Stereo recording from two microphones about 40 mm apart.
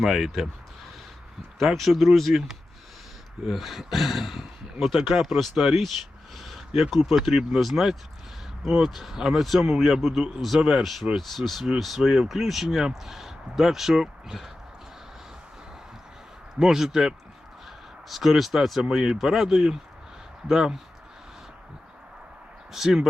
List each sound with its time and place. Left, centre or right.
0.0 s speech: centre
1.5 s speech: centre
6.3 s a sound: centre
7.1 s speech: centre
11.2 s speech: centre
11.9 s speech: centre
16.6 s speech: centre
18.8 s speech: centre
22.7 s speech: centre